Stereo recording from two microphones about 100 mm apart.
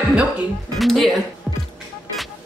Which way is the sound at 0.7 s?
Centre (ahead or behind).